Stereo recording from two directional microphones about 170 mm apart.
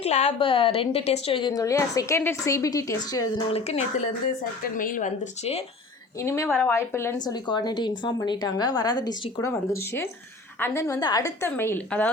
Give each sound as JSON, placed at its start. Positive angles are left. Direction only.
{"t": 0.0, "sound": "a woman's voice", "side_deg": 40}
{"t": 3.5, "sound": "speech", "side_deg": 40}
{"t": 4.8, "sound": "speech", "side_deg": 50}
{"t": 6.1, "sound": "a woman's voice", "side_deg": 15}